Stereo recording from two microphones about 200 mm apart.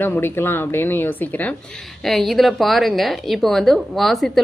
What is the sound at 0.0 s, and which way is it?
A woman's voice, 10° left (ahead or behind).